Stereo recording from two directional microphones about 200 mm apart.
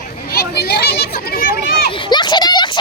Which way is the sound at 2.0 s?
20° left (ahead or behind).